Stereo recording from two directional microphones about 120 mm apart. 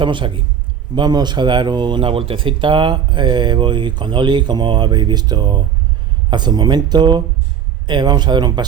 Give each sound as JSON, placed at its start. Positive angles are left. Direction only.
{"t": 0.0, "sound": "a man's voice", "side_deg": -45}